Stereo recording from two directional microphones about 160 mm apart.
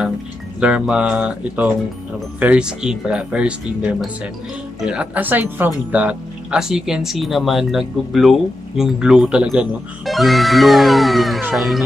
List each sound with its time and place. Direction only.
0.6 s speech: 5° right (ahead or behind)